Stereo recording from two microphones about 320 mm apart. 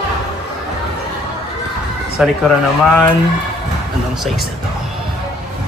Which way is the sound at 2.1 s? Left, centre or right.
Centre.